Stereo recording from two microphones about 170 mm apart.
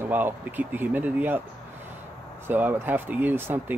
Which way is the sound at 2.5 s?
10° right (ahead or behind).